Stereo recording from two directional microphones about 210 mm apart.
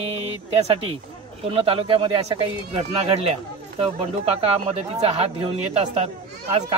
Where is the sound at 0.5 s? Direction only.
25° right (ahead or behind).